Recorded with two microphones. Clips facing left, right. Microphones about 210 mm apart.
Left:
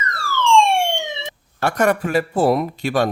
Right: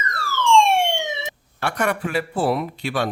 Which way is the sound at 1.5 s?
45° left (ahead or behind).